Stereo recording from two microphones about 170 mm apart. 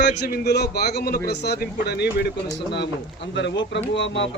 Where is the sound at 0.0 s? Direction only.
80° left.